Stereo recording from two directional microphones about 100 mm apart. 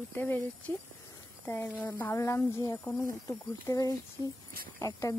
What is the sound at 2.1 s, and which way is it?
Speech, 30° left (ahead or behind).